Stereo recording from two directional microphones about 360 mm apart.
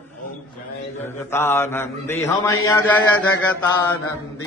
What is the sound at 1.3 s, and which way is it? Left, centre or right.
Mantra, centre.